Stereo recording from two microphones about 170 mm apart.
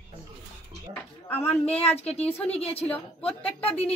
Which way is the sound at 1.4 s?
40° left (ahead or behind).